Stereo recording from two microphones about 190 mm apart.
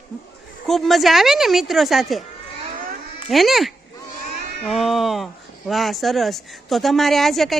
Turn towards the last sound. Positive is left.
turn(degrees=0)  # may be behind; listen again after turning